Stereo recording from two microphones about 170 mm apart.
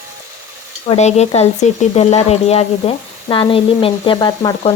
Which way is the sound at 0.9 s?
40° left (ahead or behind).